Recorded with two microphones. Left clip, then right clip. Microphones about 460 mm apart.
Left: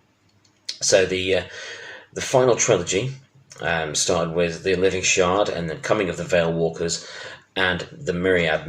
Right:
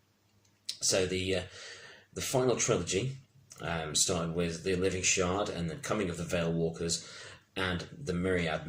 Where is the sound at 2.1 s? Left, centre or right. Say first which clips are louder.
Left 12 dB; left.